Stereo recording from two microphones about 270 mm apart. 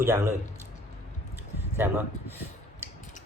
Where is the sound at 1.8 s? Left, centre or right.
Centre.